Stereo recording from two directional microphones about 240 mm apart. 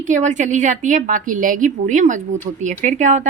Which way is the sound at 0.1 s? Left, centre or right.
Right.